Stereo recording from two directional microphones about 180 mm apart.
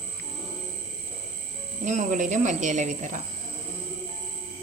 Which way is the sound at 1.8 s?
40° right (ahead or behind).